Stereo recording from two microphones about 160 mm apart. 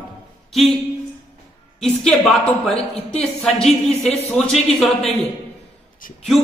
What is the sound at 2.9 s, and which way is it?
Speech, 40° left (ahead or behind).